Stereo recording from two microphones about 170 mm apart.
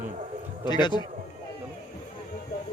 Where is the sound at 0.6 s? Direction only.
25° left (ahead or behind).